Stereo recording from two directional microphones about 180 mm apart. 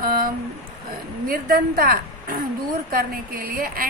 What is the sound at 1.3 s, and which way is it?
A woman's voice, 55° right (ahead or behind).